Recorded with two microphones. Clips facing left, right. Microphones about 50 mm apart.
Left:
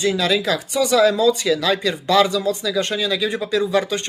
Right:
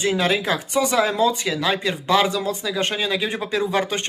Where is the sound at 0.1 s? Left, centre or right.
Right.